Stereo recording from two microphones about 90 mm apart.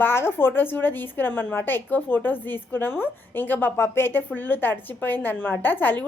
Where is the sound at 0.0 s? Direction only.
25° left (ahead or behind).